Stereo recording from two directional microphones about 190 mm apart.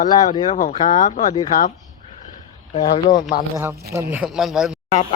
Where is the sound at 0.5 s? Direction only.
40° left (ahead or behind).